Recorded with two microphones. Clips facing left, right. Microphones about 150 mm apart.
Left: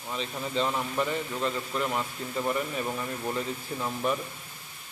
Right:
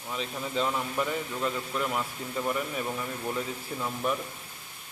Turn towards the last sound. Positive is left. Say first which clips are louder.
# left 1 dB
turn(degrees=5)  # may be behind; listen again after turning